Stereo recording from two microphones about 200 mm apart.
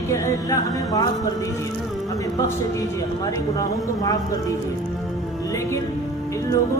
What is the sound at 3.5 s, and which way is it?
A woman's voice, 20° left (ahead or behind).